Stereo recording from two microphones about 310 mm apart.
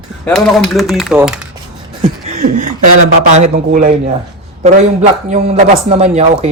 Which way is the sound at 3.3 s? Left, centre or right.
Right.